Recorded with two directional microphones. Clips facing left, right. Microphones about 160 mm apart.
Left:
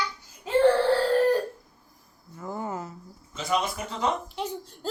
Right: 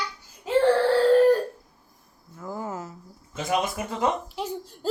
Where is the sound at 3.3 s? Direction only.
50° right (ahead or behind).